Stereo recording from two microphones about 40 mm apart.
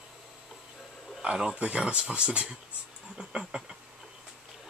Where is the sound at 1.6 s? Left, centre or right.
Right.